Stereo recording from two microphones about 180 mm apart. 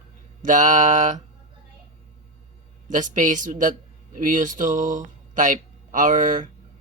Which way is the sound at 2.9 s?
45° right (ahead or behind).